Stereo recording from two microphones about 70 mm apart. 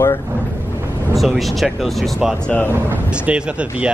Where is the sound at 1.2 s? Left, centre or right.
Centre.